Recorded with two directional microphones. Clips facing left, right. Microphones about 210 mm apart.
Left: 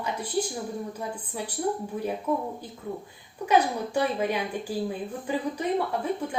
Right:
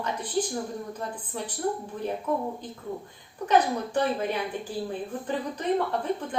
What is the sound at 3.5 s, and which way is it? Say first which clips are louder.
A woman's voice: even; 10° left (ahead or behind).